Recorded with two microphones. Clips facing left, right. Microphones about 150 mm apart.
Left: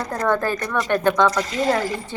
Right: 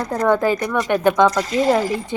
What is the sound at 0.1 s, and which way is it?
Speech, 15° right (ahead or behind).